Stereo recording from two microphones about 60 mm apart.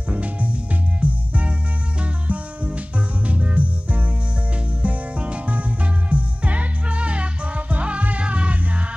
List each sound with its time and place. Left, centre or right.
0.1 s music: right